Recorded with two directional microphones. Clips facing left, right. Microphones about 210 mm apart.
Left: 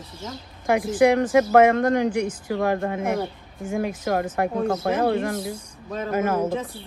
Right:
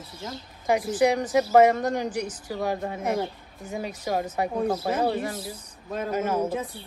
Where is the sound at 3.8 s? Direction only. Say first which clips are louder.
Left 4 dB; 55° left (ahead or behind).